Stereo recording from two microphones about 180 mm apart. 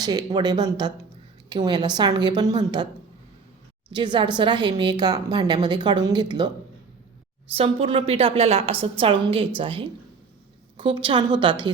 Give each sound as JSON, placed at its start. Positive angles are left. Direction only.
{"t": 0.0, "sound": "a woman's voice", "side_deg": -20}
{"t": 3.9, "sound": "a woman's voice", "side_deg": -25}
{"t": 7.5, "sound": "a woman's voice", "side_deg": -30}